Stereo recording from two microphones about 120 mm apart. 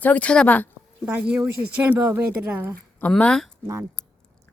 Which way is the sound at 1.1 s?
10° right (ahead or behind).